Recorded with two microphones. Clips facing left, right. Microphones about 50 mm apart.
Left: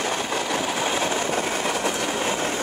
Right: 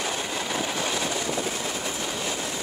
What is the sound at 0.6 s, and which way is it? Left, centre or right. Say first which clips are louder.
Train: left 3 dB; centre.